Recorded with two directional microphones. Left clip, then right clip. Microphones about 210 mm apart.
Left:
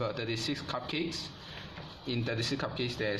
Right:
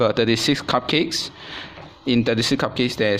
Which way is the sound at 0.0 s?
50° right (ahead or behind).